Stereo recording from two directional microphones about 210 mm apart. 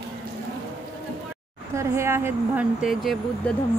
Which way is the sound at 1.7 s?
10° right (ahead or behind).